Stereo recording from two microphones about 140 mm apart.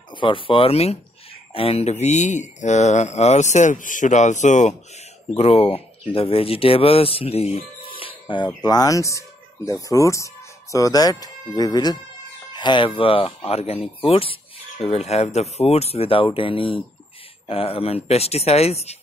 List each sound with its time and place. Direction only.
0.1 s speech: 35° left (ahead or behind); by 4.7 s 55° left (ahead or behind)
5.3 s speech: 45° left (ahead or behind)
8.6 s speech: 25° left (ahead or behind); by 18.9 s 50° left (ahead or behind)